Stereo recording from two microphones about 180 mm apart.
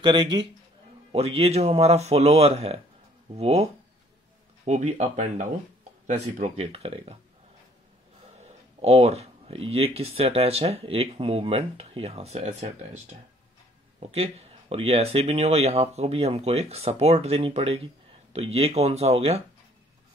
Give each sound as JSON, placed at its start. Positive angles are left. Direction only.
{"t": 0.0, "sound": "a man's voice", "side_deg": -25}
{"t": 4.6, "sound": "speech", "side_deg": -40}
{"t": 8.4, "sound": "speech", "side_deg": -35}